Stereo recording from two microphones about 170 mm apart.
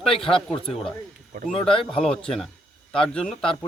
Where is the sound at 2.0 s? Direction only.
5° left (ahead or behind).